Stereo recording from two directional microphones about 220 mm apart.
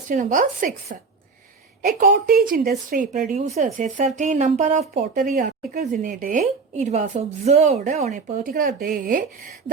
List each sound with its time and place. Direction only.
0.1 s speech: 35° right (ahead or behind)